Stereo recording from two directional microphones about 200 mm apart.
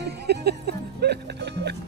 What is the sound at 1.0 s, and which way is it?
Music, 55° right (ahead or behind).